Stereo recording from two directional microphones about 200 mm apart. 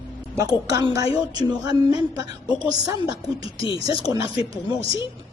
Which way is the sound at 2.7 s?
20° right (ahead or behind).